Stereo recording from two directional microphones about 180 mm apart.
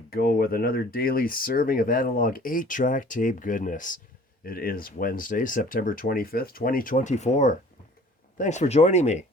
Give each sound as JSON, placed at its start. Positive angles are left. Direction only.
{"t": 0.1, "sound": "speech", "side_deg": 55}